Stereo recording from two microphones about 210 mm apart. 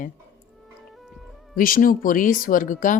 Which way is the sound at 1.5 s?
40° left (ahead or behind).